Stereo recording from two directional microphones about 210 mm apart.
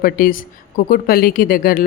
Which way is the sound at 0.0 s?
45° left (ahead or behind).